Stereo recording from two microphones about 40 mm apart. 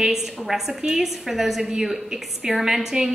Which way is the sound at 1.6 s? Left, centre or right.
Right.